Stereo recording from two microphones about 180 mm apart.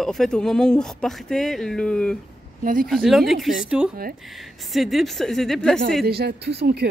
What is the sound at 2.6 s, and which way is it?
Speech, 50° right (ahead or behind).